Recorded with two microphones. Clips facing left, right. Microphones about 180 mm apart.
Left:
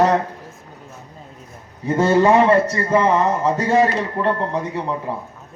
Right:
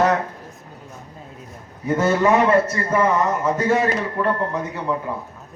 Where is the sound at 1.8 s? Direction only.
30° left (ahead or behind).